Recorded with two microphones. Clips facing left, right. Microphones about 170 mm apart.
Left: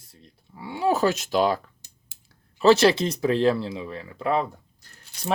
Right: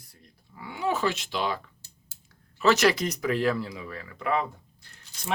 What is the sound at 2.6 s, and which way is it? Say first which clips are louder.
Speech: left 5 dB; 30° left (ahead or behind).